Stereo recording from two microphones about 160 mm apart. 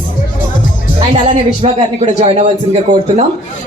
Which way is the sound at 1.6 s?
40° right (ahead or behind).